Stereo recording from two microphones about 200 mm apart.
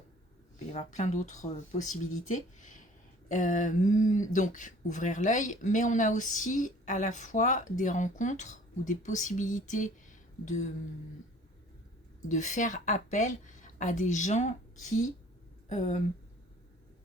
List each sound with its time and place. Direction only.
0.7 s speech: 35° left (ahead or behind)
12.3 s speech: 40° left (ahead or behind)